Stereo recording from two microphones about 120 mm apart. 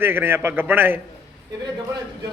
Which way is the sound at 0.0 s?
20° right (ahead or behind).